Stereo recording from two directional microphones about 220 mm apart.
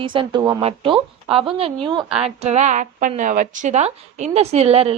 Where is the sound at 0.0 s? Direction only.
25° right (ahead or behind).